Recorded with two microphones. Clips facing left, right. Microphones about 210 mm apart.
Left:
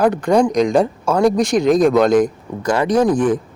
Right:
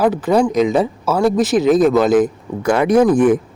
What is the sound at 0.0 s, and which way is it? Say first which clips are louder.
Speech: even; 5° right (ahead or behind).